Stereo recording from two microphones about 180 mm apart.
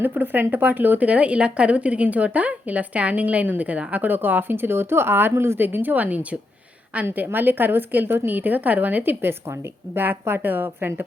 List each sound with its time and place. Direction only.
0.0 s speech: 10° right (ahead or behind)